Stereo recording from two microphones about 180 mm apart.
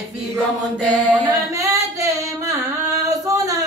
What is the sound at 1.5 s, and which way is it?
Singing, 15° right (ahead or behind).